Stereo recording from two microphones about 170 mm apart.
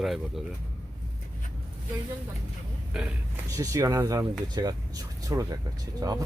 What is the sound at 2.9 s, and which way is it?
Speech, centre (ahead or behind).